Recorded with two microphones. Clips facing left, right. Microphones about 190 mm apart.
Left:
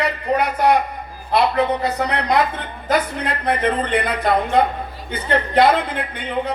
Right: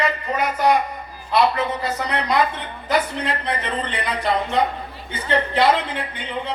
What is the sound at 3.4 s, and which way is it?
A man's voice, 50° left (ahead or behind).